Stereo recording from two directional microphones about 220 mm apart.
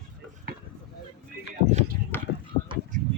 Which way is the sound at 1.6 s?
30° right (ahead or behind).